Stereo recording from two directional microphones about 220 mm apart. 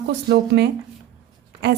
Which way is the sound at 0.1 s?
50° right (ahead or behind).